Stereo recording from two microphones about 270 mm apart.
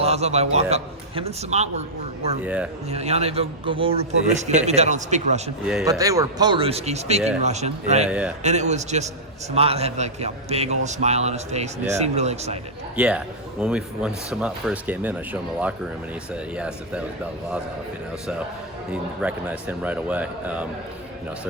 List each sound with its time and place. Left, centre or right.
0.0 s a man's voice: right
2.4 s speech: centre
2.9 s a man's voice: right
5.8 s a man's voice: centre
13.0 s speech: centre
19.2 s speech: centre